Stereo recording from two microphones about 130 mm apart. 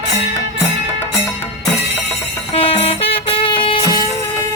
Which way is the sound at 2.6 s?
45° left (ahead or behind).